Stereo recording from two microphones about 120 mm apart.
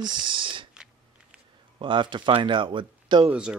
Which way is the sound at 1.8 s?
45° right (ahead or behind).